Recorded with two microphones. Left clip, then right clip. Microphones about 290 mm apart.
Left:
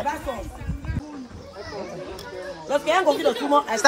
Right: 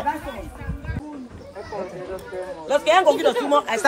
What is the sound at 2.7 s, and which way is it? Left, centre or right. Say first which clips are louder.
Speech: right 4 dB; right.